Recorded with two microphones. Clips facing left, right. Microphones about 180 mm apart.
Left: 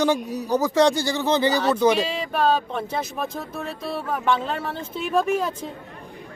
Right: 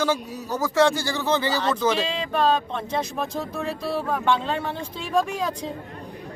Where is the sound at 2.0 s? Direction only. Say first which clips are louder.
Left 1 dB; 5° left (ahead or behind).